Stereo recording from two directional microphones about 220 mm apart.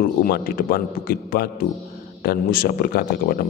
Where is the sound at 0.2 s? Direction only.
40° left (ahead or behind).